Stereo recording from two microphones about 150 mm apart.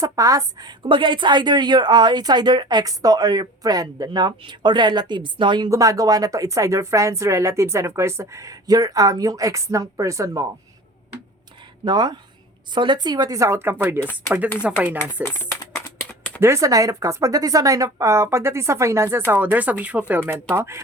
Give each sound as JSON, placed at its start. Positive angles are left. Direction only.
{"t": 0.0, "sound": "a woman's voice", "side_deg": -25}
{"t": 11.9, "sound": "a woman's voice", "side_deg": -30}
{"t": 16.0, "sound": "a sound", "side_deg": 10}
{"t": 16.4, "sound": "a woman's voice", "side_deg": -20}